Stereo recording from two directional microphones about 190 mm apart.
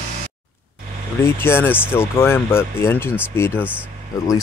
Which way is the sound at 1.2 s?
10° left (ahead or behind).